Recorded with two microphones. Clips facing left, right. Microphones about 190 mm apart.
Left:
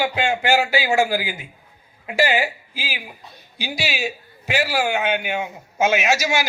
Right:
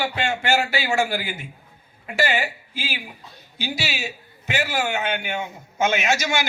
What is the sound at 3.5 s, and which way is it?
A man's voice, 15° left (ahead or behind).